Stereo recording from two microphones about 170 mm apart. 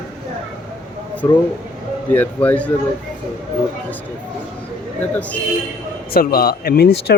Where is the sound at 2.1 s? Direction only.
10° left (ahead or behind).